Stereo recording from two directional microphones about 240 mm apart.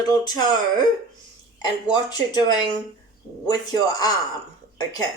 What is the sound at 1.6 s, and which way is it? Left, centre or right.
A woman's voice, centre.